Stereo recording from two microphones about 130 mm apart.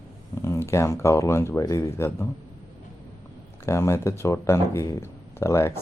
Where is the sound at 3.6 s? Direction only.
20° left (ahead or behind).